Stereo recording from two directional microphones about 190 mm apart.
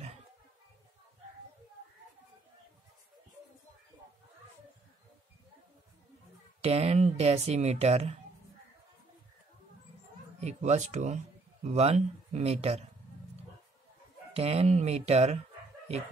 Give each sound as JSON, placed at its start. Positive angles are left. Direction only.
{"t": 6.6, "sound": "speech", "side_deg": -35}
{"t": 10.4, "sound": "speech", "side_deg": -35}
{"t": 14.3, "sound": "speech", "side_deg": -35}